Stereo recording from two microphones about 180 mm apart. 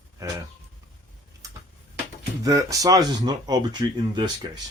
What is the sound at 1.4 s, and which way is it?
Tick-tock, 20° right (ahead or behind).